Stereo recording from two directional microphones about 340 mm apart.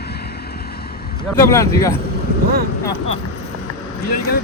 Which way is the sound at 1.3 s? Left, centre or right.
Centre.